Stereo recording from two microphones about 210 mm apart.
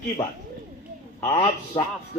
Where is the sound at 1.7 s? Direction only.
20° left (ahead or behind).